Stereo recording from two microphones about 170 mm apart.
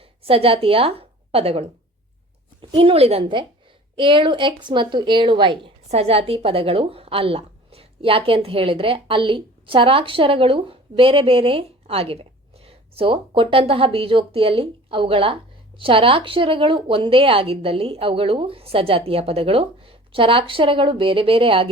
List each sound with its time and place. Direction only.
0.2 s a woman's voice: 35° right (ahead or behind)